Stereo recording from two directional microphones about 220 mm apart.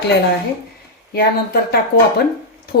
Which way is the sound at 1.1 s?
45° left (ahead or behind).